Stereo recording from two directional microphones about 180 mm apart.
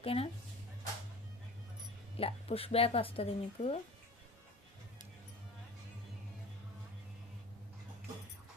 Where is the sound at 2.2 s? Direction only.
30° left (ahead or behind).